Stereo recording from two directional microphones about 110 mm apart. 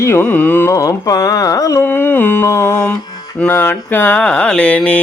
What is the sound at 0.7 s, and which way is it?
Carnatic music, 30° left (ahead or behind).